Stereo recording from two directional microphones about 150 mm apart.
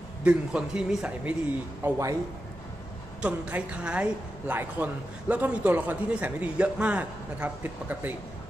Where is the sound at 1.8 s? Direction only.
20° right (ahead or behind).